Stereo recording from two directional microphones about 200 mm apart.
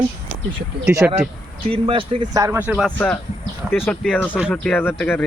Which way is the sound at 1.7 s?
25° right (ahead or behind).